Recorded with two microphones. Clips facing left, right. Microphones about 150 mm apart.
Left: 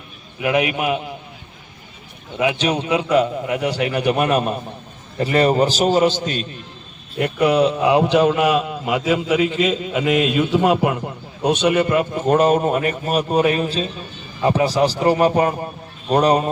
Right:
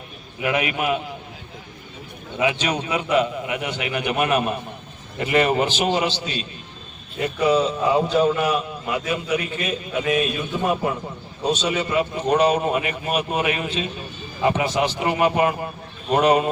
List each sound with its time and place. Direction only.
0.4 s a man's voice: 20° left (ahead or behind)
2.4 s a man's voice: 15° left (ahead or behind)
3.1 s a man's voice: 35° left (ahead or behind)
7.2 s a man's voice: 65° left (ahead or behind); by 15.5 s 40° left (ahead or behind)